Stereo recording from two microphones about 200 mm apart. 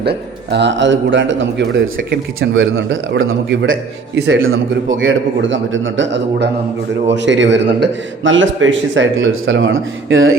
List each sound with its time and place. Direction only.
0.0 s a man's voice: 55° right (ahead or behind); by 10.3 s 85° right